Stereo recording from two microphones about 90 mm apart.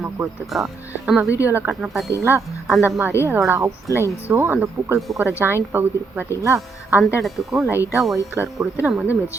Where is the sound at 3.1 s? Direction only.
30° left (ahead or behind).